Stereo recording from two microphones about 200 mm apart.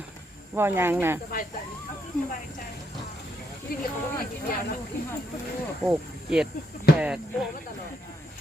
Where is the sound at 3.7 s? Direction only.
50° left (ahead or behind).